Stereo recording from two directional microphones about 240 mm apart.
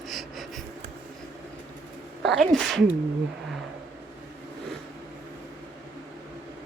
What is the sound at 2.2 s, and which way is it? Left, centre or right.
Sneeze, centre.